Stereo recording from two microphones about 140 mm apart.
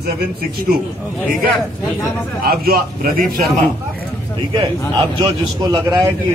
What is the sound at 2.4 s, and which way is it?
Speech, 90° right.